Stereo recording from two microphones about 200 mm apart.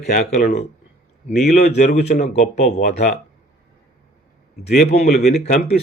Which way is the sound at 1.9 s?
40° left (ahead or behind).